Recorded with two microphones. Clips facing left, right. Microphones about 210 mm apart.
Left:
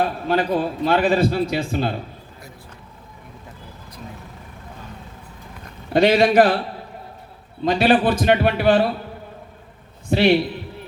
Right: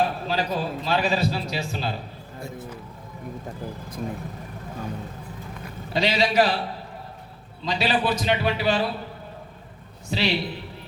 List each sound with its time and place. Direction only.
0.3 s a man's voice: 55° left (ahead or behind)
5.9 s a man's voice: 55° left (ahead or behind)
7.6 s a man's voice: 55° left (ahead or behind)
10.1 s a man's voice: 55° left (ahead or behind)